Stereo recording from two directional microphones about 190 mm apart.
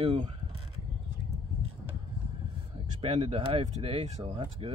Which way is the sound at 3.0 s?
30° right (ahead or behind).